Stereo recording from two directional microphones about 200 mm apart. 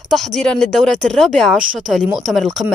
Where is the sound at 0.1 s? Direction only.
Centre (ahead or behind).